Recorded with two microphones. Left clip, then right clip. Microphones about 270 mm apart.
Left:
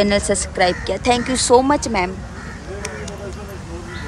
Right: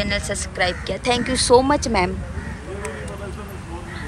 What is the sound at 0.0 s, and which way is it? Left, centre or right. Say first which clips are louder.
A woman's voice: left 7 dB; left.